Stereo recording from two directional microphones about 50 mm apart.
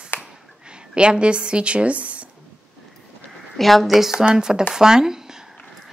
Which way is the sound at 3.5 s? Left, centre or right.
Centre.